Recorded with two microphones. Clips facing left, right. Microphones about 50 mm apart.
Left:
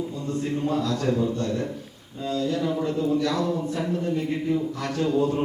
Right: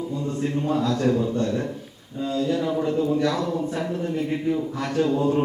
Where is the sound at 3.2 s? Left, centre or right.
Right.